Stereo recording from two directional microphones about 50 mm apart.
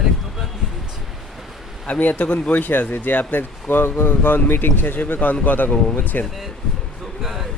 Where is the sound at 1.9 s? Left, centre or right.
Left.